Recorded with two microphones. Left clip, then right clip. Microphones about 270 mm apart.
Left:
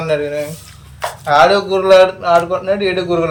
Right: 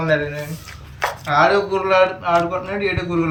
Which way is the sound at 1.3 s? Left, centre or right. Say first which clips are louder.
Left 5 dB; left.